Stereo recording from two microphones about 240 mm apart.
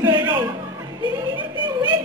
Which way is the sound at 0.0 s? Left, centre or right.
Centre.